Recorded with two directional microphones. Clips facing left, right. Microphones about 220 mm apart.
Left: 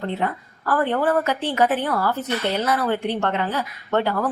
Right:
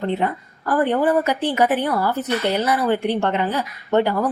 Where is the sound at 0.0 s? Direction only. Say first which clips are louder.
Right 3 dB; 15° right (ahead or behind).